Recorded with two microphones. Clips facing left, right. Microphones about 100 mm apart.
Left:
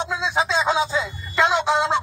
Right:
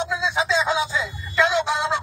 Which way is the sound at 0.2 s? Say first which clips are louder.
Left 1 dB; 35° left (ahead or behind).